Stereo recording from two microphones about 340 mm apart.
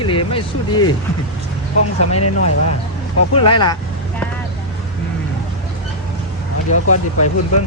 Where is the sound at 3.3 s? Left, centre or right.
Centre.